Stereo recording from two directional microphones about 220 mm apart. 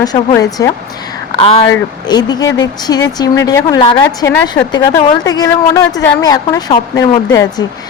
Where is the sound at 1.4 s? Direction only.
25° left (ahead or behind).